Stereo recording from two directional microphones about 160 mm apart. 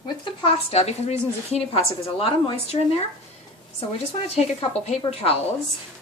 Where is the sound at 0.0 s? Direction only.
30° left (ahead or behind).